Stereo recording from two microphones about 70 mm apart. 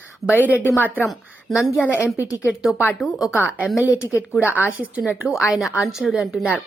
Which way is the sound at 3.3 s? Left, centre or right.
Centre.